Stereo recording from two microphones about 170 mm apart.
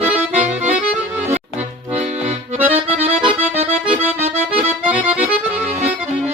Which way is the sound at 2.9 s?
40° right (ahead or behind).